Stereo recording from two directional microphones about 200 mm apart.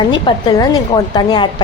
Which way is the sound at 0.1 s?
20° left (ahead or behind).